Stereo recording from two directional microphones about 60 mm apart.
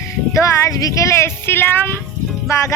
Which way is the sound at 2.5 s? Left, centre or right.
Left.